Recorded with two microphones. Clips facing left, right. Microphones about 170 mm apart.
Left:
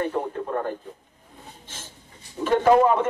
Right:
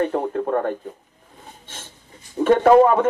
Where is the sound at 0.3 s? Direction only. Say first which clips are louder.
Right 6 dB; 55° right (ahead or behind).